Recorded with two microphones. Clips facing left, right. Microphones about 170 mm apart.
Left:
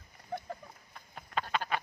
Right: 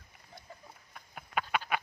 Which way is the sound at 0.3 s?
65° left (ahead or behind).